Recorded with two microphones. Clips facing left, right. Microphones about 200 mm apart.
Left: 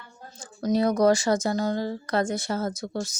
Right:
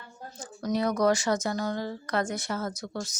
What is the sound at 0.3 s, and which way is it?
Speech, 30° left (ahead or behind).